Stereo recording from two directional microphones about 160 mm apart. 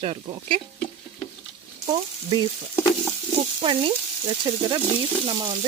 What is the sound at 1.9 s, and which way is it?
Speech, 30° right (ahead or behind).